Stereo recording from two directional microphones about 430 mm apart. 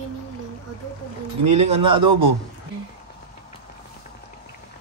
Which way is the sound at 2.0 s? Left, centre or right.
Right.